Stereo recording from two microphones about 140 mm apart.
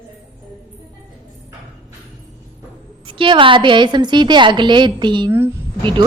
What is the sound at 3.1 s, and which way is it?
A woman's voice, 35° right (ahead or behind).